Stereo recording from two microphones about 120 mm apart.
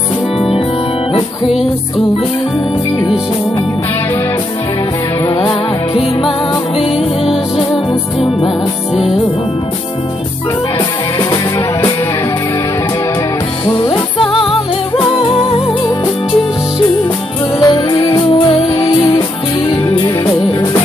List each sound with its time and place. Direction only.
5.5 s music: 50° left (ahead or behind)
15.1 s music: 50° left (ahead or behind)
17.6 s music: 25° left (ahead or behind)
18.1 s music: 40° left (ahead or behind)
18.8 s music: 30° left (ahead or behind)